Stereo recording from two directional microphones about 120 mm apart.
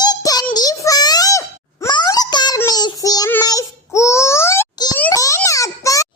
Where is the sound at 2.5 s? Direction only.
30° left (ahead or behind).